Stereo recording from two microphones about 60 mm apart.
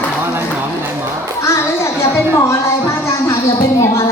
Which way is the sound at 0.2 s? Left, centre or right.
Right.